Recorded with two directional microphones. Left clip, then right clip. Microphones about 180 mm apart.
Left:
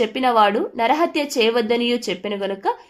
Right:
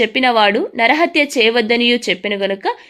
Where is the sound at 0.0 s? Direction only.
25° right (ahead or behind).